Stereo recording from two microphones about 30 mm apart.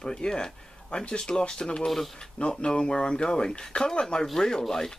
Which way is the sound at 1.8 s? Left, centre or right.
Centre.